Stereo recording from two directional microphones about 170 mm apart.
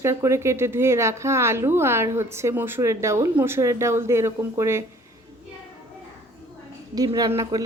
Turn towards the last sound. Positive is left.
turn(degrees=-20)  # may be behind; listen again after turning